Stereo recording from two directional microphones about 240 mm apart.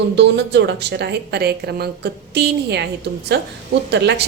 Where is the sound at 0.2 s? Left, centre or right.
Right.